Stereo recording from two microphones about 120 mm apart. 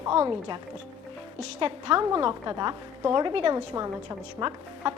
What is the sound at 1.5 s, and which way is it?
A woman's voice, 50° right (ahead or behind).